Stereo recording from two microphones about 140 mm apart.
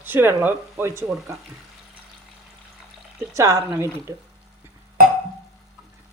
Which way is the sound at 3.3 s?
20° right (ahead or behind).